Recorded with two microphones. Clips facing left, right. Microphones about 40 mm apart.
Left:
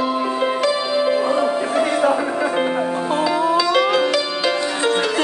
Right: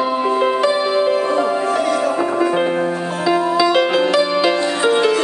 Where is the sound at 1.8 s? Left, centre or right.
Left.